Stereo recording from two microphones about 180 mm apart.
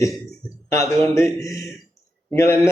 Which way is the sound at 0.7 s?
15° left (ahead or behind).